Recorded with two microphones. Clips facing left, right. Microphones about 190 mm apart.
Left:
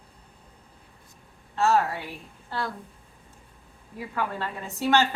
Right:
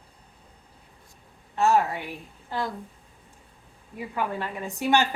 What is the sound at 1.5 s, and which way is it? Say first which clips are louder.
Speech: right 1 dB; 15° right (ahead or behind).